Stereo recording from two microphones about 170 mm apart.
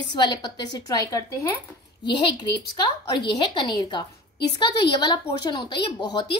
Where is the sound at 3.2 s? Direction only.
25° left (ahead or behind).